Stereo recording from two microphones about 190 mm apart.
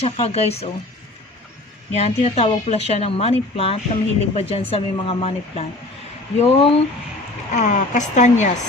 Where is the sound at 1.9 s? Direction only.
35° left (ahead or behind).